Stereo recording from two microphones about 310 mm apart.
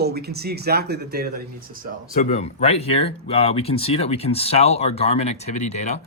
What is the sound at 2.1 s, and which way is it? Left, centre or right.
Speech, left.